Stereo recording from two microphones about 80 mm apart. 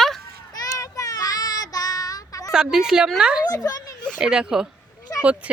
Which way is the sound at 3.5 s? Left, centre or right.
Left.